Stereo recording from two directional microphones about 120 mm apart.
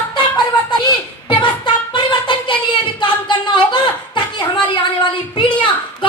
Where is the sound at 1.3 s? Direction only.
40° left (ahead or behind).